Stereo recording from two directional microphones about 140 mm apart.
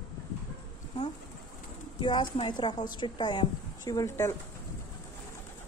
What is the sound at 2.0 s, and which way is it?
A woman's voice, 35° left (ahead or behind).